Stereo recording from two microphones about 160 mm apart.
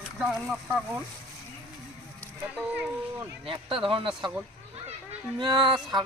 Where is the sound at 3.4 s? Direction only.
35° right (ahead or behind).